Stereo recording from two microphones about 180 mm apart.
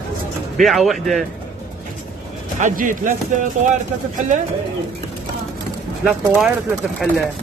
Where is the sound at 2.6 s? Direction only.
45° right (ahead or behind).